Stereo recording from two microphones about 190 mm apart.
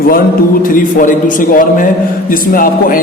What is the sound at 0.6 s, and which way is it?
A man's voice, 45° left (ahead or behind).